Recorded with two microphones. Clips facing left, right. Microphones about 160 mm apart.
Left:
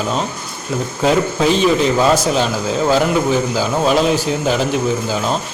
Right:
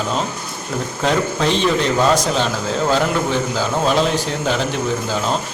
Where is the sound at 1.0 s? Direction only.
5° left (ahead or behind).